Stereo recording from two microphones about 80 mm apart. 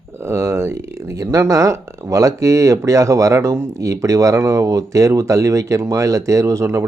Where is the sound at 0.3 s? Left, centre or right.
Right.